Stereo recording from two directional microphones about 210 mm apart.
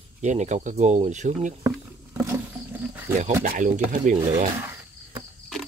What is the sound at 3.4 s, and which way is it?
Speech, 40° right (ahead or behind).